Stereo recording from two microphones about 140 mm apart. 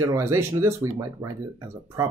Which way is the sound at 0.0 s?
20° right (ahead or behind).